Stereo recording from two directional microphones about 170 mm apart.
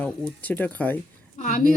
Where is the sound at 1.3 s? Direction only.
50° left (ahead or behind).